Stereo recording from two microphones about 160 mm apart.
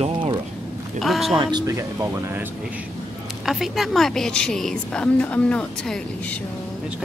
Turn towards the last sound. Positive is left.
turn(degrees=5)  # may be behind; listen again after turning